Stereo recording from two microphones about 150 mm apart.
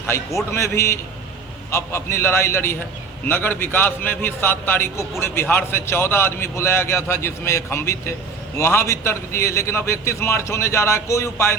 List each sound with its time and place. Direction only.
0.5 s a man's voice: 20° left (ahead or behind)